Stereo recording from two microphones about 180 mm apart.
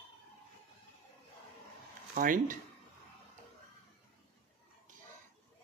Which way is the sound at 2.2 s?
50° right (ahead or behind).